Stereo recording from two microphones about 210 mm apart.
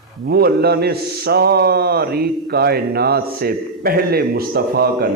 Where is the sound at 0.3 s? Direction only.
50° right (ahead or behind).